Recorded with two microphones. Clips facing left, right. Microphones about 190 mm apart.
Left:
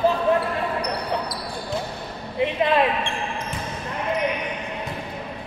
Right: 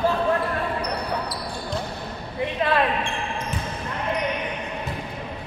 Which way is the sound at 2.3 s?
20° left (ahead or behind).